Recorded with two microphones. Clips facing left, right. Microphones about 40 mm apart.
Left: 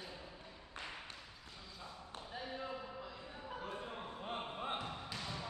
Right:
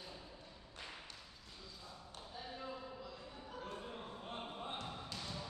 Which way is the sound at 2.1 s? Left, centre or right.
Left.